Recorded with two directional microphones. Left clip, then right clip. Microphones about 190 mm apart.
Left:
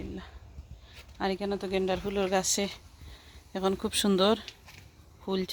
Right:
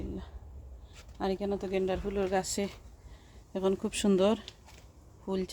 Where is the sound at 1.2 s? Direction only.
20° left (ahead or behind).